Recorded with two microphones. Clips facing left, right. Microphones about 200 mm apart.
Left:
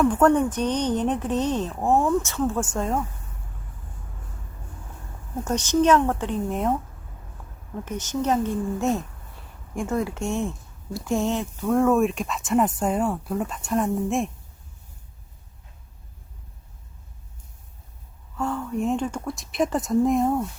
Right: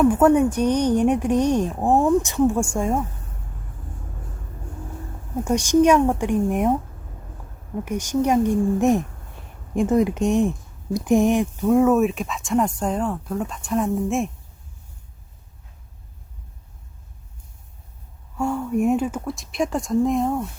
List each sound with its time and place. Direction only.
0.0 s speech: 10° right (ahead or behind)
5.5 s speech: 10° right (ahead or behind)
7.9 s speech: 10° right (ahead or behind)
18.3 s speech: 10° right (ahead or behind)